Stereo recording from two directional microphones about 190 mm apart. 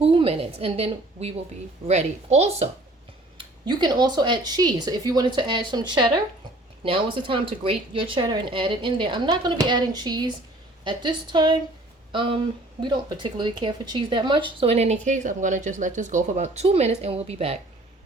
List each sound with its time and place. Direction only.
0.0 s a woman's voice: 30° right (ahead or behind)
3.3 s speech: 25° right (ahead or behind)